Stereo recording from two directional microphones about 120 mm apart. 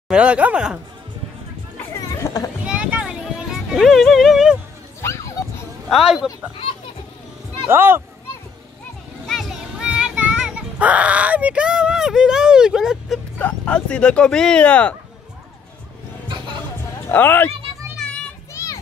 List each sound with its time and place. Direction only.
0.1 s speech: 10° right (ahead or behind)
2.0 s chatter: 30° left (ahead or behind)
2.6 s music: 10° right (ahead or behind)
5.9 s speech: 5° right (ahead or behind)
7.6 s speech: 20° right (ahead or behind)
9.3 s child singing: centre (ahead or behind)
13.4 s speech: 10° left (ahead or behind)
17.1 s speech: 15° left (ahead or behind)
17.9 s children playing: 5° left (ahead or behind)
18.5 s vehicle: 25° left (ahead or behind)